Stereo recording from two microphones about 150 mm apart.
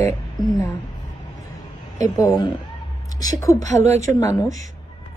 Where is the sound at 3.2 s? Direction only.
25° left (ahead or behind).